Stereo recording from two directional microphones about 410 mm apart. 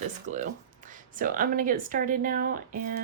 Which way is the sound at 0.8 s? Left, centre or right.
Centre.